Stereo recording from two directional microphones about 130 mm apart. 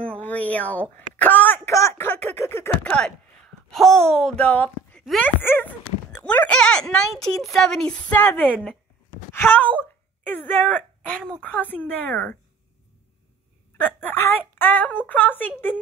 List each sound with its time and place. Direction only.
0.0 s a sound: 10° left (ahead or behind)
3.7 s speech: centre (ahead or behind)
13.7 s speech: 15° left (ahead or behind)